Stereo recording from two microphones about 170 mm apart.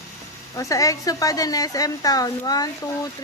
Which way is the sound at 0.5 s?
20° left (ahead or behind).